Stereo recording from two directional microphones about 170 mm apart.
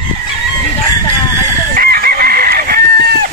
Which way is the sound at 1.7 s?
60° right (ahead or behind).